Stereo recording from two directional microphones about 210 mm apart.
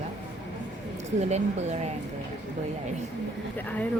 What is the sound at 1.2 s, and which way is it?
Speech, 30° right (ahead or behind).